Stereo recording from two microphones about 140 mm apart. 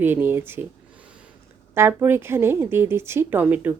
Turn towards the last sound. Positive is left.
turn(degrees=-15)  # may be behind; listen again after turning